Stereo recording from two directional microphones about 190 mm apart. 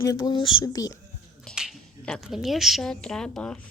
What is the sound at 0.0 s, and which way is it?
Speech, 20° left (ahead or behind).